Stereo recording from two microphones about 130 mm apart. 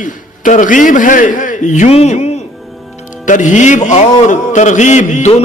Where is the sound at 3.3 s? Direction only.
75° left (ahead or behind).